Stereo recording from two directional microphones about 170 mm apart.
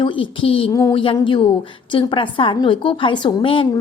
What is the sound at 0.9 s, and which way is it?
A woman's voice, 30° left (ahead or behind).